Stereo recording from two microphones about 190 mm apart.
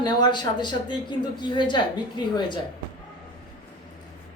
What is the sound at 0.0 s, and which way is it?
Speech, 20° left (ahead or behind).